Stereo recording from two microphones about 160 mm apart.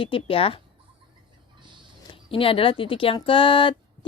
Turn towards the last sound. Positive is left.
turn(degrees=30)  # may be behind; listen again after turning